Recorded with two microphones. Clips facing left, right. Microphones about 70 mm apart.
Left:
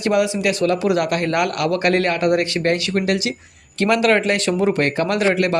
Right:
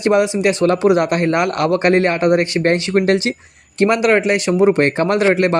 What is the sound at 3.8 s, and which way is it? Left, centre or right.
Speech, right.